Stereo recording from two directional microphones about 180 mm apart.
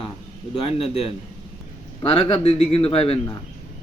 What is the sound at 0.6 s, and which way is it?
A man's voice, 30° left (ahead or behind).